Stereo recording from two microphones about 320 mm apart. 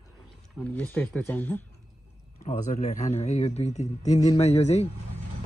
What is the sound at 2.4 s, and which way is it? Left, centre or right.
A man's voice, left.